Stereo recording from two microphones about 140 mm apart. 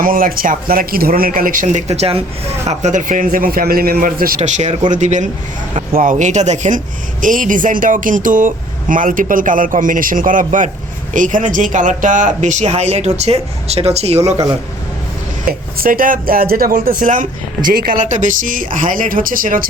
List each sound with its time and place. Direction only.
0.0 s speech: 90° right; by 2.2 s 45° right (ahead or behind)
2.6 s a man's voice: 60° right (ahead or behind); by 4.4 s 90° right
4.4 s speech: 55° right (ahead or behind)
5.7 s speech: 75° right (ahead or behind); by 14.3 s 50° right (ahead or behind)
15.8 s speech: 85° right